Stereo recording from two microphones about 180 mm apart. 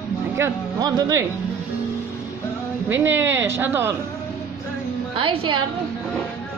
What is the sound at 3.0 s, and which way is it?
Speech, 10° right (ahead or behind).